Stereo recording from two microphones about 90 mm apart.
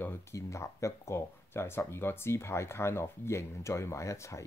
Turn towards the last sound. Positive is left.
turn(degrees=35)  # may be behind; listen again after turning